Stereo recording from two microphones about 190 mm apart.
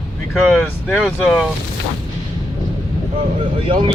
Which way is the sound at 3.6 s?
25° right (ahead or behind).